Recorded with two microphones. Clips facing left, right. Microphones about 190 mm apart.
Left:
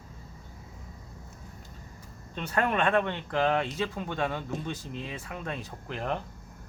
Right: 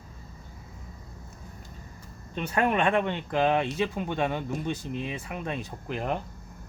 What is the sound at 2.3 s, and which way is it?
Speech, 15° right (ahead or behind).